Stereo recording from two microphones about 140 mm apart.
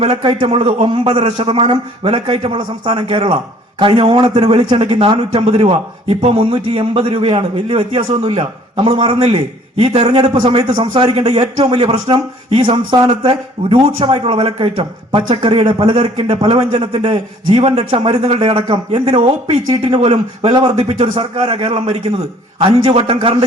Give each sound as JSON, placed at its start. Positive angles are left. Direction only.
{"t": 0.0, "sound": "a man's voice", "side_deg": -40}
{"t": 10.6, "sound": "a man's voice", "side_deg": -30}
{"t": 11.1, "sound": "a man's voice", "side_deg": -45}